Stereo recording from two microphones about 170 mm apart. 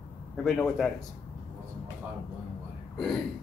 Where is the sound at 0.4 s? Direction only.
5° left (ahead or behind).